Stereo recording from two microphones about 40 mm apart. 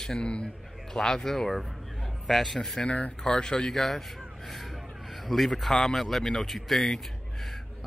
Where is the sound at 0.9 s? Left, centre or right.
Centre.